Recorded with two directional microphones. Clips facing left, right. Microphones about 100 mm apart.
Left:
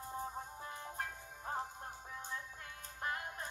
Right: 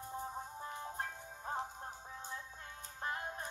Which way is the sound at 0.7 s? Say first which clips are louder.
Right 1 dB; 20° right (ahead or behind).